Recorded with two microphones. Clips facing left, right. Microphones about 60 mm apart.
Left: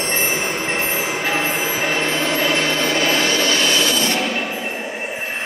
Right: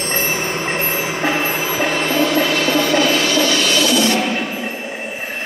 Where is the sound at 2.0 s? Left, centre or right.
Left.